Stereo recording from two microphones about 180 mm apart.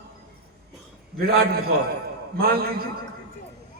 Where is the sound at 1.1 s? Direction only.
55° right (ahead or behind).